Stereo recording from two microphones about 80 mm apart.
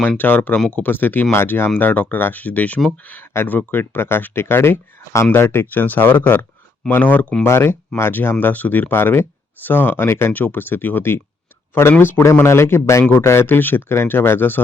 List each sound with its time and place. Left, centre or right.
0.2 s speech: left
7.4 s speech: left